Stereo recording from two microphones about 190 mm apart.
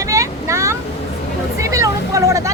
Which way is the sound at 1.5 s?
15° right (ahead or behind).